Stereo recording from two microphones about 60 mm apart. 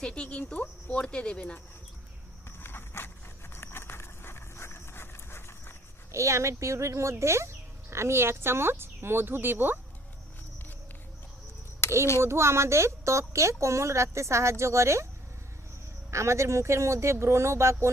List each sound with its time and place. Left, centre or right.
0.0 s speech: centre
2.6 s zipper: left
3.5 s a sound: left
6.1 s speech: right
11.8 s a child's voice: left
12.2 s speech: right
16.1 s speech: right